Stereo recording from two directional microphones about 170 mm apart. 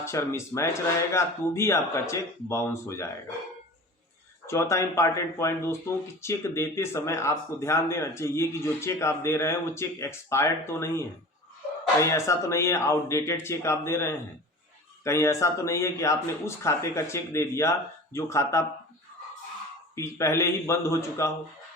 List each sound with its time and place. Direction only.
0.0 s speech: 15° left (ahead or behind)
4.4 s speech: 15° left (ahead or behind)
20.0 s speech: 15° left (ahead or behind)